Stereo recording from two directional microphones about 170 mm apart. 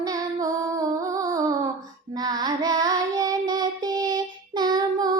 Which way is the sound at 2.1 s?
25° right (ahead or behind).